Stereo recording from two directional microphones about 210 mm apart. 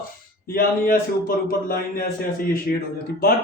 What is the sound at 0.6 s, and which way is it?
A man's voice, 45° left (ahead or behind).